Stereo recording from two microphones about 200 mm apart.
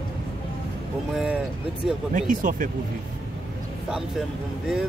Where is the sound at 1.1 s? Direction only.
5° right (ahead or behind).